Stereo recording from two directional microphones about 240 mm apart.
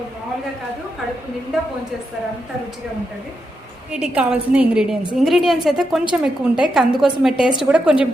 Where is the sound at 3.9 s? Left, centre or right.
Centre.